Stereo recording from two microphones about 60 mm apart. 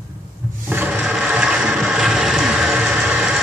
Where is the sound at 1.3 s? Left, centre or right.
Centre.